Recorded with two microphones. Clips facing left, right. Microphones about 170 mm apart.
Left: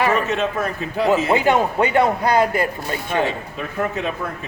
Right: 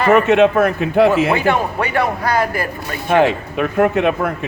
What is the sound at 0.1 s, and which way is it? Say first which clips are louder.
A man's voice: right 9 dB; 70° right (ahead or behind).